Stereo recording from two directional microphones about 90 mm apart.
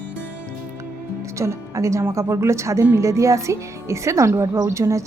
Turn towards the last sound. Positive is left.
turn(degrees=-35)  # may be behind; listen again after turning